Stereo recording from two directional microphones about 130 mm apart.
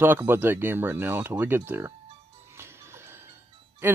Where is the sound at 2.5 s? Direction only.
20° right (ahead or behind).